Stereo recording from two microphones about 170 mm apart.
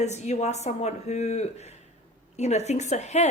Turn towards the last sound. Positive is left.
turn(degrees=40)  # may be behind; listen again after turning